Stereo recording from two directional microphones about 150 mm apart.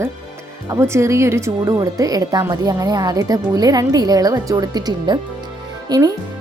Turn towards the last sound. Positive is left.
turn(degrees=-25)  # may be behind; listen again after turning